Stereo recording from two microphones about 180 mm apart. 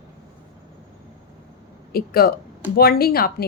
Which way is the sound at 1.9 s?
55° left (ahead or behind).